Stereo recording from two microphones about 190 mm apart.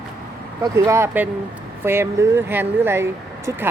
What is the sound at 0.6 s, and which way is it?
Speech, 15° right (ahead or behind).